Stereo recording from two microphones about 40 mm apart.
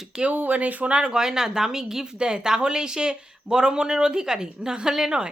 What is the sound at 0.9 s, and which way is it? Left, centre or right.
Speech, right.